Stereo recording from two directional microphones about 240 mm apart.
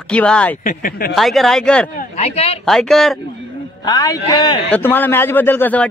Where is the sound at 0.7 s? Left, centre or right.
Left.